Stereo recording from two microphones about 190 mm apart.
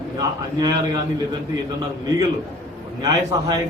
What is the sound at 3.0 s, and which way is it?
Speech, 20° right (ahead or behind).